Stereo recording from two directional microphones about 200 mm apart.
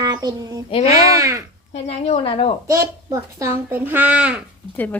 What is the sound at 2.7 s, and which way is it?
A child's voice, 15° right (ahead or behind).